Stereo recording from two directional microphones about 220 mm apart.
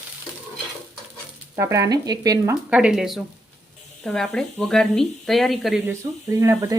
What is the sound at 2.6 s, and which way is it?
Speech, 5° right (ahead or behind).